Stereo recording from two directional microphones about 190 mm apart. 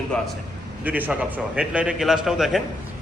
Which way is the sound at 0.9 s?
10° right (ahead or behind).